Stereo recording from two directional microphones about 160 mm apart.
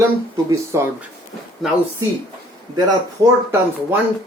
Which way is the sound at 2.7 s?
25° right (ahead or behind).